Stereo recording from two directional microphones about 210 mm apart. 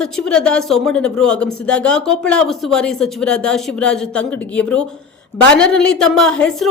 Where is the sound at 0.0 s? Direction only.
5° left (ahead or behind).